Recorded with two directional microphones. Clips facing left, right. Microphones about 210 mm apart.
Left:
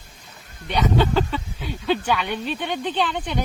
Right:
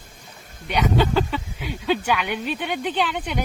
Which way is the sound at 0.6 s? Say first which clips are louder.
Even; 10° right (ahead or behind).